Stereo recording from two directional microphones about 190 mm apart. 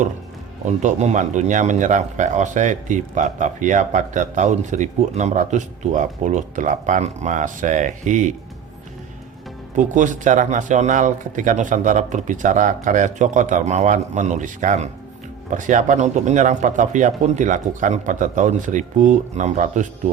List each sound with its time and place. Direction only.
0.6 s speech: 40° right (ahead or behind)
9.7 s speech: 40° right (ahead or behind)